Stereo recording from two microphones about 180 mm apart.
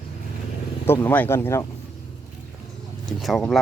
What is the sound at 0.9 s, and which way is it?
Speech, 10° left (ahead or behind).